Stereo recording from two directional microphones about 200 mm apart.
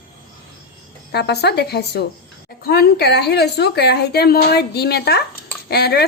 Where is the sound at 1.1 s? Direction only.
55° left (ahead or behind).